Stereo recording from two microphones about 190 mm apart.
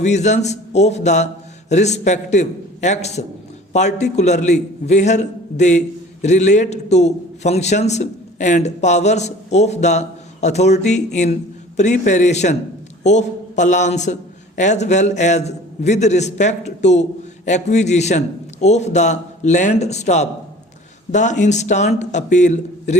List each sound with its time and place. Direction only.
0.0 s a man's voice: 35° left (ahead or behind)